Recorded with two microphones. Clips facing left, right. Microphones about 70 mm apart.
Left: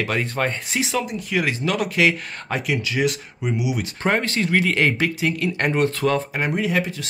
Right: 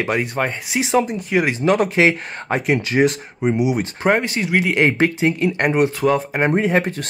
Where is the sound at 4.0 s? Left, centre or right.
Centre.